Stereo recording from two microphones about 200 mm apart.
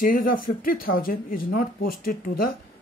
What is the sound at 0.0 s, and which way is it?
A woman's voice, 40° left (ahead or behind).